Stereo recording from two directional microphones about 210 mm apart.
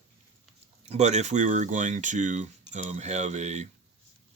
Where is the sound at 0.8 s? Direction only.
30° right (ahead or behind).